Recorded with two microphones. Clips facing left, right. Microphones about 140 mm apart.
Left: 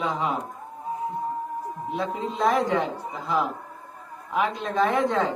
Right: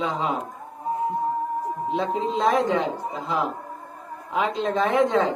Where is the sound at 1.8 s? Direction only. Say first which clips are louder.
Right 3 dB; 20° right (ahead or behind).